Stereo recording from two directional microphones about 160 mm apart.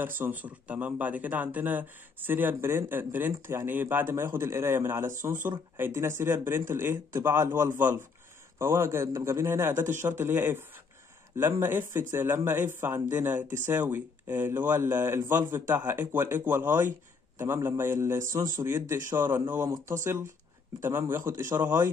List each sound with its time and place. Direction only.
0.0 s speech: 10° right (ahead or behind)
11.6 s speech: 15° right (ahead or behind)